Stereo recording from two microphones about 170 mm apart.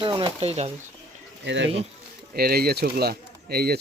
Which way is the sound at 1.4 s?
90° right.